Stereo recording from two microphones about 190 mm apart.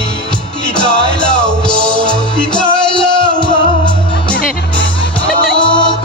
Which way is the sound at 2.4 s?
25° left (ahead or behind).